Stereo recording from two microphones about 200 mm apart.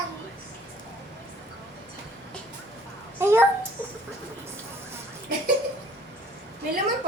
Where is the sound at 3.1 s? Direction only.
10° right (ahead or behind).